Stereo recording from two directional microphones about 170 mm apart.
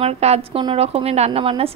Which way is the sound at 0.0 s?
35° right (ahead or behind).